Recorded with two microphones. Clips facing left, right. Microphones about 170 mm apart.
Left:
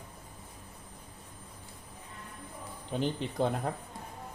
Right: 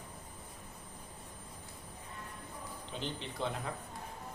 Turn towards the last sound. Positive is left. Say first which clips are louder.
# left 7 dB
turn(degrees=45)  # may be behind; listen again after turning